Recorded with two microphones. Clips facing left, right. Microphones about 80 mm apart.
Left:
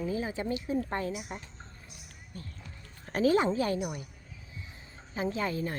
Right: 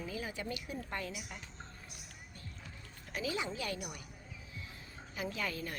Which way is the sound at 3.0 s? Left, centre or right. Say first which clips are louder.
Left 13 dB; left.